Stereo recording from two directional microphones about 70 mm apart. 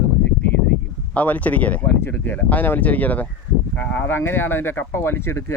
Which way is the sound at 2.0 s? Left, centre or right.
Left.